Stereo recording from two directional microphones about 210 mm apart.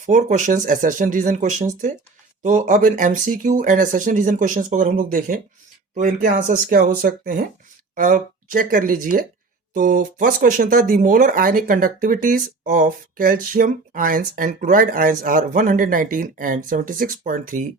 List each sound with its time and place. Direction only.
0.0 s speech: 35° right (ahead or behind)